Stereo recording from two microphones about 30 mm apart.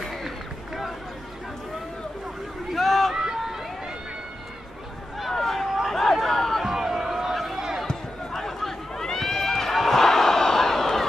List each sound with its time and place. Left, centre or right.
2.7 s run: centre
3.1 s run: centre
5.3 s a sound: centre
5.9 s chatter: centre
6.6 s a sound: centre
7.8 s run: centre